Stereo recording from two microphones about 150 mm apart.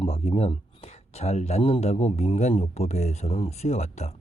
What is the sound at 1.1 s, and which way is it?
Speech, 45° left (ahead or behind).